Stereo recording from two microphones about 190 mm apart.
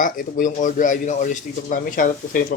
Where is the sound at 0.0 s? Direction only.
45° left (ahead or behind).